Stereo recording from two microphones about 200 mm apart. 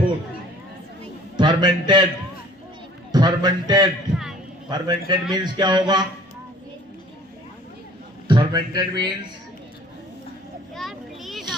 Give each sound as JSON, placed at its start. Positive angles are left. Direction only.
{"t": 1.4, "sound": "a man's voice", "side_deg": -20}
{"t": 3.1, "sound": "a man's voice", "side_deg": -20}
{"t": 8.3, "sound": "a man's voice", "side_deg": -20}
{"t": 10.8, "sound": "children playing", "side_deg": 0}